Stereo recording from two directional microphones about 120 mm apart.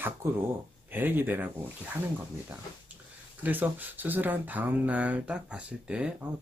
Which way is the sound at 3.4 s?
15° right (ahead or behind).